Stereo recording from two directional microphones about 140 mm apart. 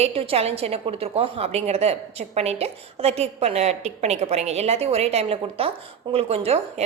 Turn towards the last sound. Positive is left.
turn(degrees=-45)  # may be behind; listen again after turning